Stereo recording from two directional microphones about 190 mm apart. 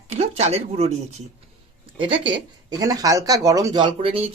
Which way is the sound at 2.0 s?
25° right (ahead or behind).